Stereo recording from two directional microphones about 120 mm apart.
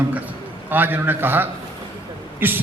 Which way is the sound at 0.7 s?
15° right (ahead or behind).